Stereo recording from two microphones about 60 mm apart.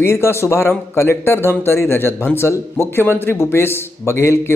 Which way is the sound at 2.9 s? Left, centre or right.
Left.